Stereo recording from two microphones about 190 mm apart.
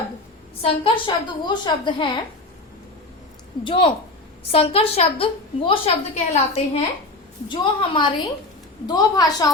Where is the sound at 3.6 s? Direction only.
25° left (ahead or behind).